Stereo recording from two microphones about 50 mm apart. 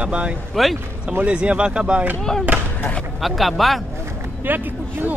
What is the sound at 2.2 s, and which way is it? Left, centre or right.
Speech, centre.